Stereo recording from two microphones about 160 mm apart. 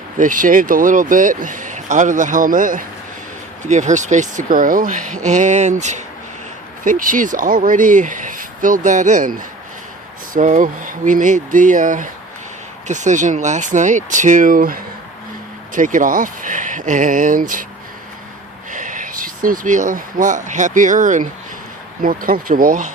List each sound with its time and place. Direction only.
0.2 s speech: 55° right (ahead or behind)
10.3 s speech: 55° right (ahead or behind)
18.7 s speech: 55° right (ahead or behind)